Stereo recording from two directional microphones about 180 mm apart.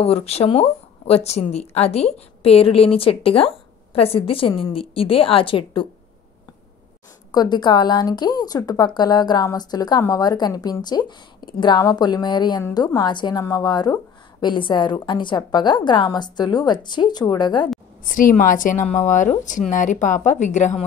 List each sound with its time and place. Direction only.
0.0 s speech: 35° left (ahead or behind)
7.3 s speech: 25° left (ahead or behind)
18.0 s speech: 50° left (ahead or behind)